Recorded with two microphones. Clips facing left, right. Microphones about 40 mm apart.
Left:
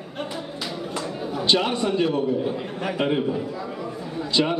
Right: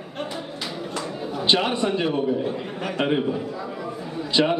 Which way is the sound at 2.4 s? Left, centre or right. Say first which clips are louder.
Left 1 dB; centre.